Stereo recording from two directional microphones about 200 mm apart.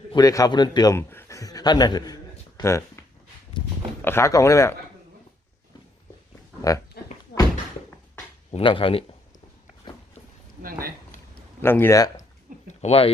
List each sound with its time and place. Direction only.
0.1 s a man's voice: 15° left (ahead or behind)
4.0 s speech: 15° left (ahead or behind)
7.0 s a sound: 55° left (ahead or behind)
8.4 s a man's voice: 25° left (ahead or behind)
10.6 s speech: 45° right (ahead or behind)
11.6 s speech: 10° left (ahead or behind)
12.6 s a sound: 30° left (ahead or behind)